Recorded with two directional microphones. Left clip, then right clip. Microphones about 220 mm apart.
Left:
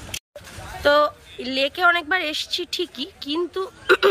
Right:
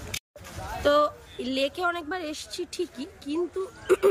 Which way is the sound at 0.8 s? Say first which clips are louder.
Left 5 dB; 5° right (ahead or behind).